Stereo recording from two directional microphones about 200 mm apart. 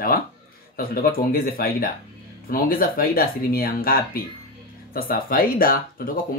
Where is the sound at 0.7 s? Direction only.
50° left (ahead or behind).